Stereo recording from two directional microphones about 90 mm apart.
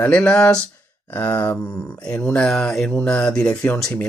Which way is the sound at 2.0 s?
10° left (ahead or behind).